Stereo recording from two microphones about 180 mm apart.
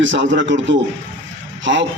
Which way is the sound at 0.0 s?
90° right.